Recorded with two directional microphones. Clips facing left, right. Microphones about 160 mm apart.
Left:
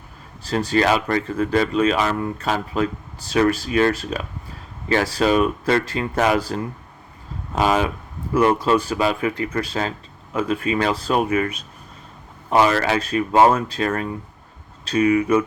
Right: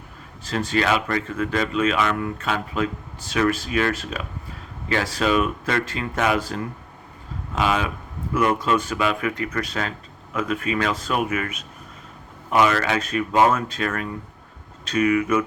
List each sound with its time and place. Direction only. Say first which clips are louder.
0.4 s speech: left 4 dB; 35° left (ahead or behind)